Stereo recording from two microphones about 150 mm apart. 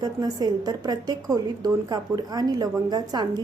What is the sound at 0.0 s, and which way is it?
A woman's voice, 25° right (ahead or behind).